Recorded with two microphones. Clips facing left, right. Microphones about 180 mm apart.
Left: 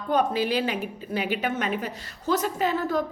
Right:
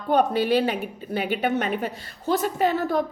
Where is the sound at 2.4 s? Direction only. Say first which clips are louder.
Right 3 dB; 55° right (ahead or behind).